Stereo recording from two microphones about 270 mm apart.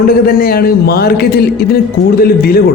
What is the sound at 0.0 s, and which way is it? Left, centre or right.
Speech, left.